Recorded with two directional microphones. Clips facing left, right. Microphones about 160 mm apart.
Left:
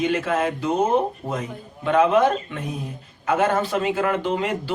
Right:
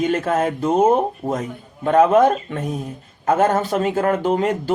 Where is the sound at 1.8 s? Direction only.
40° right (ahead or behind).